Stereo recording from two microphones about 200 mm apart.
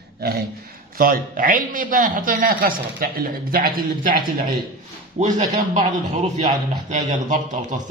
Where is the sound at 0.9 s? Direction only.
45° right (ahead or behind).